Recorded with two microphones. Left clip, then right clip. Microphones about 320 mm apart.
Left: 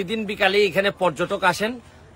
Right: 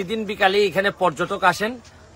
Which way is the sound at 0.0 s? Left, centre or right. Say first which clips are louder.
Right 1 dB; centre.